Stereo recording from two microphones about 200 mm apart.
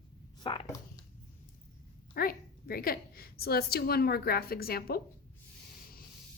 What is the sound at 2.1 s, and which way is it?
A woman's voice, 50° left (ahead or behind).